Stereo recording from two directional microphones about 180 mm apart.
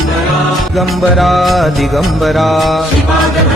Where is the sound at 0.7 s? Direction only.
Centre (ahead or behind).